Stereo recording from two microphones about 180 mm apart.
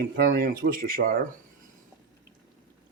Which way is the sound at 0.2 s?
55° right (ahead or behind).